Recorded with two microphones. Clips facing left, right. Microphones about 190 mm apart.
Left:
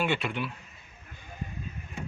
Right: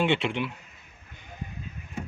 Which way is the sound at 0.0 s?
25° right (ahead or behind).